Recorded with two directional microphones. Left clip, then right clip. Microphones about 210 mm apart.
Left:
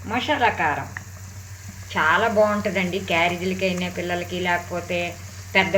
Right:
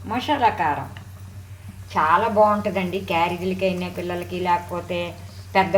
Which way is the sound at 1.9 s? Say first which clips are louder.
Right 1 dB; centre (ahead or behind).